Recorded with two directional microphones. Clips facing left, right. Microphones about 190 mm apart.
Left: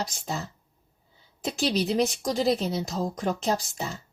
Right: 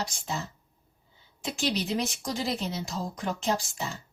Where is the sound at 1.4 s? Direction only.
40° left (ahead or behind).